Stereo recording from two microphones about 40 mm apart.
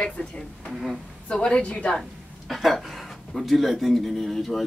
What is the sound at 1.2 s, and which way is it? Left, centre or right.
Speech, left.